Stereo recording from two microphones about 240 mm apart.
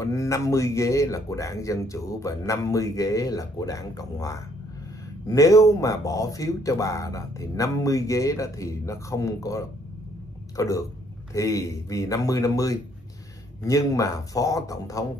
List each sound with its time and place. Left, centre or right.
0.0 s speech: centre